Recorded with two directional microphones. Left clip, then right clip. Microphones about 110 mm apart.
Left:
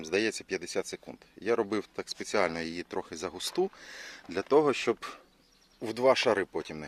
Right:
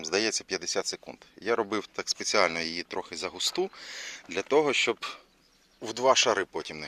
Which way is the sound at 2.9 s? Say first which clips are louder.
Right 2 dB; 85° left.